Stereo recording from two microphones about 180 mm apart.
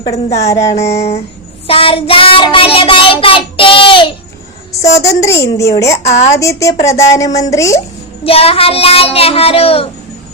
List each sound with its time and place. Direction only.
0.4 s speech: 15° left (ahead or behind)
0.9 s a child's voice: 35° left (ahead or behind)
1.6 s child singing: 30° left (ahead or behind)
5.0 s speech: 15° left (ahead or behind)
6.0 s a child's voice: 35° left (ahead or behind)
6.4 s speech: 15° left (ahead or behind)
8.2 s a child's voice: 30° left (ahead or behind)